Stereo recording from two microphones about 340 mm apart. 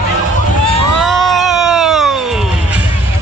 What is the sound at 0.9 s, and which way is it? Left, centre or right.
Music, centre.